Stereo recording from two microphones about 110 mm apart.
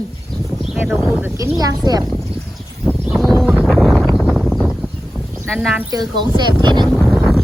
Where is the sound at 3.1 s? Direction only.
Centre (ahead or behind).